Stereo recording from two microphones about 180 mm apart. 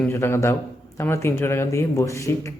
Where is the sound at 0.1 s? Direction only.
15° left (ahead or behind).